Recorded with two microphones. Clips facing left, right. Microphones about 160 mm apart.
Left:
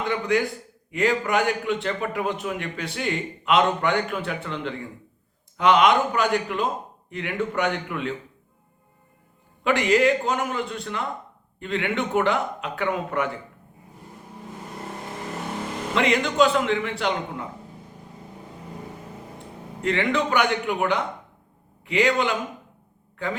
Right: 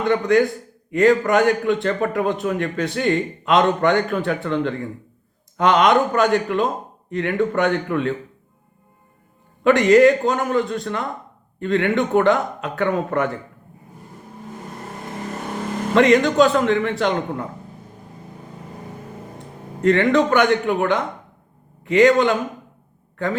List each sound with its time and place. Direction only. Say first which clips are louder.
0.9 s a man's voice: right 7 dB; 45° right (ahead or behind)
9.6 s a man's voice: right 7 dB; 45° right (ahead or behind)
16.0 s a man's voice: right 6 dB; 45° right (ahead or behind)
19.8 s a man's voice: right 8 dB; 45° right (ahead or behind)